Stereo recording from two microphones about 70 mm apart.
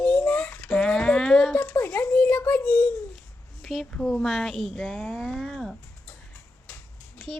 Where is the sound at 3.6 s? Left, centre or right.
Centre.